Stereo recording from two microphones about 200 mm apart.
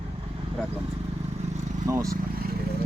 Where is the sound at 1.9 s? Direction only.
15° right (ahead or behind).